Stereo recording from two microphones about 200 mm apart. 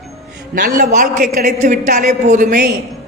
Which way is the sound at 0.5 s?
40° right (ahead or behind).